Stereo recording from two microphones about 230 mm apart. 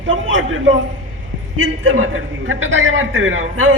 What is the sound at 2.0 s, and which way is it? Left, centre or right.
A man's voice, right.